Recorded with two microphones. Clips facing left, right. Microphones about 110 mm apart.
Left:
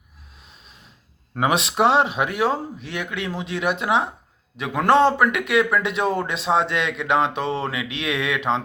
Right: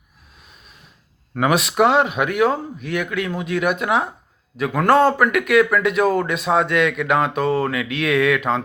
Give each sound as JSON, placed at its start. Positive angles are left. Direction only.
{"t": 1.4, "sound": "speech", "side_deg": 25}